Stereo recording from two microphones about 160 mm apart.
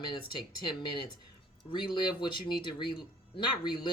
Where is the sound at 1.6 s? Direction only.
30° left (ahead or behind).